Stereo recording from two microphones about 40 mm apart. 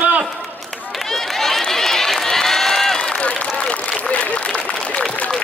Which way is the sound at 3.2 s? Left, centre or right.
Left.